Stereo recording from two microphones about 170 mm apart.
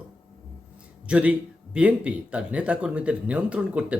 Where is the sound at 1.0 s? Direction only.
5° right (ahead or behind).